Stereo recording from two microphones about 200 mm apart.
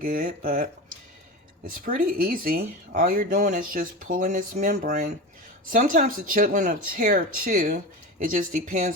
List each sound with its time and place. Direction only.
0.0 s speech: 45° right (ahead or behind)